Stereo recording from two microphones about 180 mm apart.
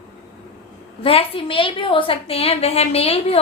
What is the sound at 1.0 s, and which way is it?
A woman's voice, 30° left (ahead or behind).